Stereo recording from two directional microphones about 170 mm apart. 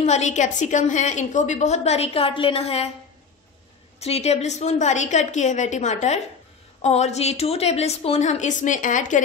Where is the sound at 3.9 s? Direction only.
40° left (ahead or behind).